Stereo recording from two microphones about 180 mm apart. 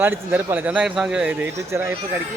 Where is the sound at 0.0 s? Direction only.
10° right (ahead or behind).